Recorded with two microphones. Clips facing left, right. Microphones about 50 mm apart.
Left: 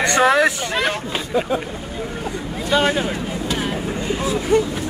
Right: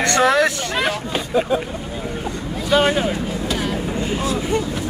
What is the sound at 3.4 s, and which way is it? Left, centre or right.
Vehicle, centre.